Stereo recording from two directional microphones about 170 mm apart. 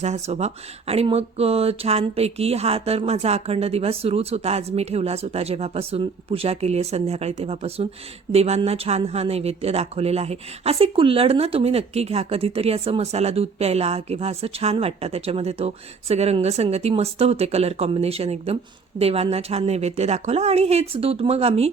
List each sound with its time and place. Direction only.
0.0 s speech: 40° right (ahead or behind)